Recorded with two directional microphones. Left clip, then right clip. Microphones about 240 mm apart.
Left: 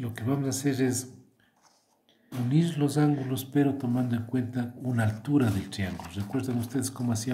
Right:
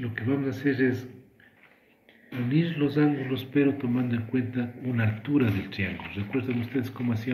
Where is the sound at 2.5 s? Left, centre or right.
Left.